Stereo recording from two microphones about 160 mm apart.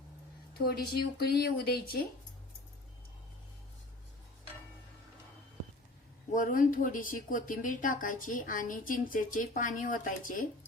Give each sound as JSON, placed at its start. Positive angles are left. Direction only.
{"t": 0.6, "sound": "speech", "side_deg": 80}
{"t": 6.3, "sound": "speech", "side_deg": 60}